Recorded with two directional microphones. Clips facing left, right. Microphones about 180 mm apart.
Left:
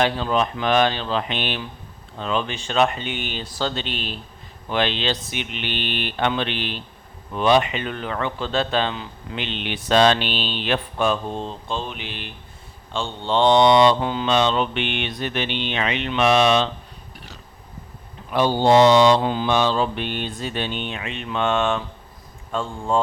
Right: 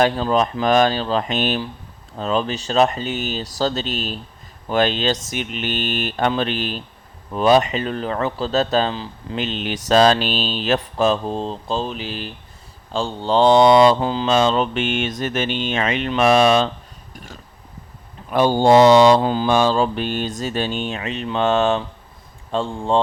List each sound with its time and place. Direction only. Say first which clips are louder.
0.0 s speech: right 3 dB; 40° right (ahead or behind)
4.7 s mantra: right 4 dB; 45° right (ahead or behind)
7.3 s speech: right 3 dB; 40° right (ahead or behind)
14.4 s mantra: right 3 dB; 40° right (ahead or behind)
18.3 s speech: right 3 dB; 45° right (ahead or behind); by 23.0 s 30° right (ahead or behind)